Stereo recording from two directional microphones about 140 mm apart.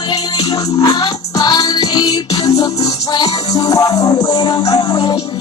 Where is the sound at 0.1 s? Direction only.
30° left (ahead or behind).